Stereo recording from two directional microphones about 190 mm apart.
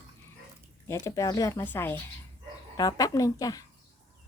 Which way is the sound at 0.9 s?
15° left (ahead or behind).